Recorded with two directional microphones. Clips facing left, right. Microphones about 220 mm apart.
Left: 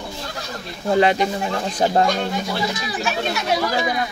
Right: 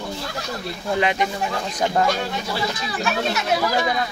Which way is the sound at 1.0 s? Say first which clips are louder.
Left 4 dB; 35° left (ahead or behind).